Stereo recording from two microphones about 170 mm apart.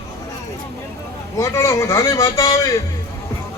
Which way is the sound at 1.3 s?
15° left (ahead or behind).